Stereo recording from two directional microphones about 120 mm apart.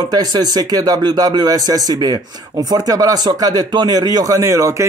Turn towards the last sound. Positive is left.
turn(degrees=-25)  # may be behind; listen again after turning